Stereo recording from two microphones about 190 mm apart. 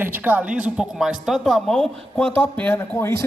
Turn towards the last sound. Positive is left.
turn(degrees=15)  # may be behind; listen again after turning